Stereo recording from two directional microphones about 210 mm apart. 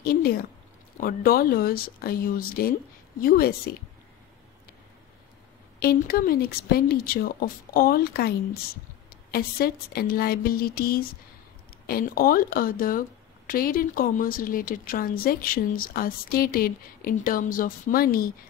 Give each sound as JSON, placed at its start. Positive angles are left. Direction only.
{"t": 0.0, "sound": "a sound", "side_deg": 45}
{"t": 1.0, "sound": "a woman's voice", "side_deg": 45}
{"t": 5.8, "sound": "a woman's voice", "side_deg": 45}
{"t": 9.3, "sound": "a woman's voice", "side_deg": 45}